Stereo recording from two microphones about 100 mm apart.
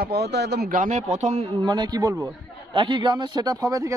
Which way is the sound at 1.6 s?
45° right (ahead or behind).